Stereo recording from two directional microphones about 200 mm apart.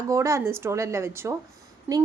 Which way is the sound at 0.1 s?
15° right (ahead or behind).